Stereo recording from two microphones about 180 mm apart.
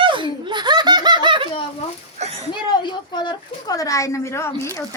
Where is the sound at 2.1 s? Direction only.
40° right (ahead or behind).